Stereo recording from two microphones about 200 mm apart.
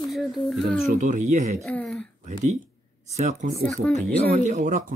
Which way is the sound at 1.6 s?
5° left (ahead or behind).